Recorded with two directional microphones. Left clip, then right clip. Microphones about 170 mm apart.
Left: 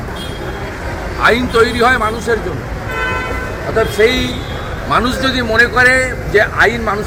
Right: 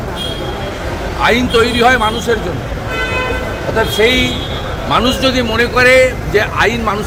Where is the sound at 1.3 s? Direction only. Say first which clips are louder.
Even; 10° right (ahead or behind).